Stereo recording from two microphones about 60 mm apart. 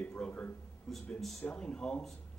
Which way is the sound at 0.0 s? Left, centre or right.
Left.